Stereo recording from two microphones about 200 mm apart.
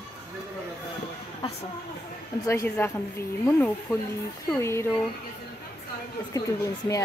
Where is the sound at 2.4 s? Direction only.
10° left (ahead or behind).